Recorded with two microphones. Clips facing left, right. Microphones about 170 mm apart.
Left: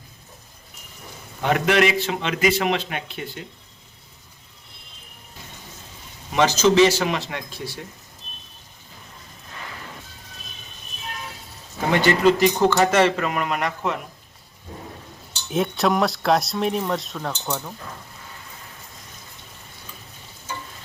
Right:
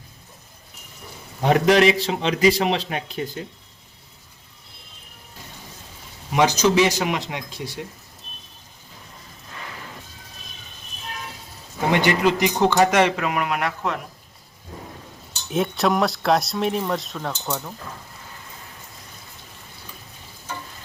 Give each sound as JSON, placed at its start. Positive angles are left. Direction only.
{"t": 1.4, "sound": "a man's voice", "side_deg": -35}
{"t": 6.3, "sound": "speech", "side_deg": -15}
{"t": 12.0, "sound": "speech", "side_deg": -15}
{"t": 15.4, "sound": "speech", "side_deg": 0}